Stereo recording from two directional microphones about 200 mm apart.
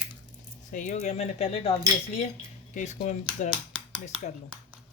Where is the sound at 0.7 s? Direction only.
40° left (ahead or behind).